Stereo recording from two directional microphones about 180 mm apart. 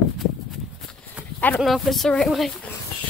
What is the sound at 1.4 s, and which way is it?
Speech, 5° left (ahead or behind).